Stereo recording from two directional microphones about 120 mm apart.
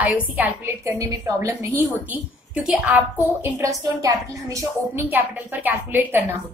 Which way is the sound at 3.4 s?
25° right (ahead or behind).